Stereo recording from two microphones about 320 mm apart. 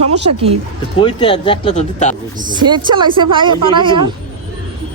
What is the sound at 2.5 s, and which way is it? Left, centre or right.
Speech, centre.